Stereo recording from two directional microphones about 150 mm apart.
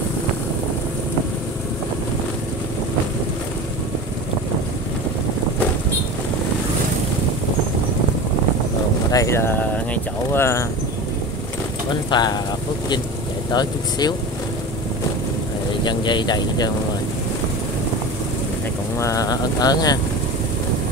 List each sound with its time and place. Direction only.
9.1 s speech: 20° left (ahead or behind)
11.9 s speech: 30° left (ahead or behind)
13.5 s speech: 25° left (ahead or behind)
15.8 s speech: 30° left (ahead or behind)
18.9 s speech: 20° left (ahead or behind)